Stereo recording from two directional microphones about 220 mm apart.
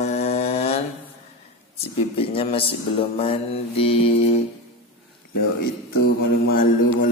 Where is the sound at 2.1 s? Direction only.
25° left (ahead or behind).